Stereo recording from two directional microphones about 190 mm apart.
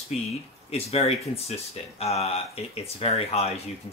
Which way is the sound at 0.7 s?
30° left (ahead or behind).